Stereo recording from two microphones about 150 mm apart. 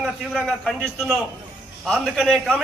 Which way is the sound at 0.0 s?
5° right (ahead or behind).